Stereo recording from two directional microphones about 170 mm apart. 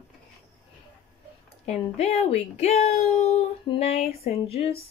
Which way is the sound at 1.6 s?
40° left (ahead or behind).